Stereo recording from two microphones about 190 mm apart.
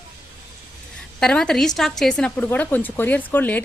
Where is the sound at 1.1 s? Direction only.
5° left (ahead or behind).